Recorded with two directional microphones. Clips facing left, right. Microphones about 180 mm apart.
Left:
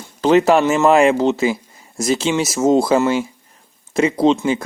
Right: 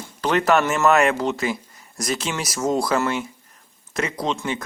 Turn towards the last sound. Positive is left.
turn(degrees=30)  # may be behind; listen again after turning